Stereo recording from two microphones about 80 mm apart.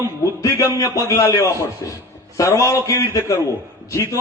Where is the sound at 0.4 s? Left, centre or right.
Left.